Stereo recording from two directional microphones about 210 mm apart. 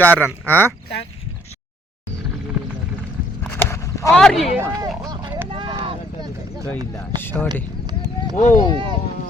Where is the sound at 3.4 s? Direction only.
10° left (ahead or behind).